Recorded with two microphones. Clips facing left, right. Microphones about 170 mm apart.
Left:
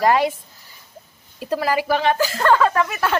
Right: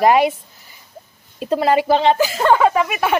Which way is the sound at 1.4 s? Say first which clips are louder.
Right 5 dB; 25° right (ahead or behind).